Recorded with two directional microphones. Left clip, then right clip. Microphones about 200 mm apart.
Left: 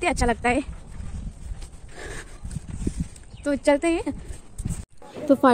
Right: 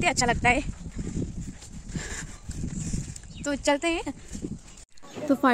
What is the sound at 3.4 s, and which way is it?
Speech, 5° right (ahead or behind).